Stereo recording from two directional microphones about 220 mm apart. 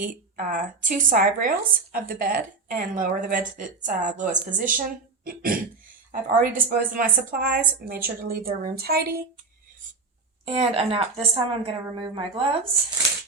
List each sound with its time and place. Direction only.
0.0 s speech: 40° right (ahead or behind)
10.4 s a woman's voice: 25° right (ahead or behind)